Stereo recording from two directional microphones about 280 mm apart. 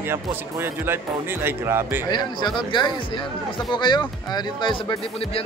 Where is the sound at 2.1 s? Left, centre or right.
Centre.